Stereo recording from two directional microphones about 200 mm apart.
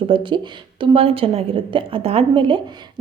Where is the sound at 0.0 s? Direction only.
25° right (ahead or behind).